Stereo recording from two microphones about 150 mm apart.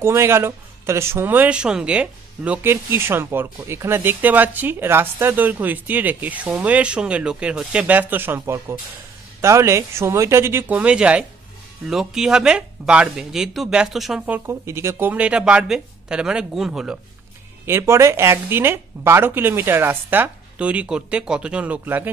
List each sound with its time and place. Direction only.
0.0 s speech: 15° right (ahead or behind)
17.6 s speech: 15° right (ahead or behind)